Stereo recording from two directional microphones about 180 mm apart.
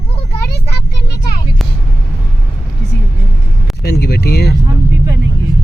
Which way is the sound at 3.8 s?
60° left (ahead or behind).